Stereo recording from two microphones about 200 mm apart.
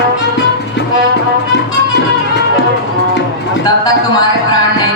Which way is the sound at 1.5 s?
60° left (ahead or behind).